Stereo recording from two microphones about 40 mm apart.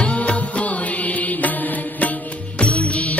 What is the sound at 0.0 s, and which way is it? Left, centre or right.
Music, left.